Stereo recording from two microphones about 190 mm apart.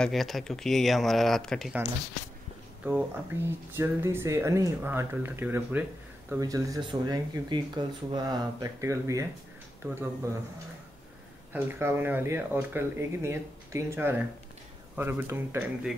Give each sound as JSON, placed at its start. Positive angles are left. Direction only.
{"t": 0.0, "sound": "speech", "side_deg": 0}
{"t": 11.5, "sound": "speech", "side_deg": -10}